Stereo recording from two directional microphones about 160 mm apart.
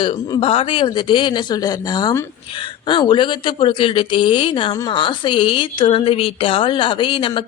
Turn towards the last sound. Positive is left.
turn(degrees=30)  # may be behind; listen again after turning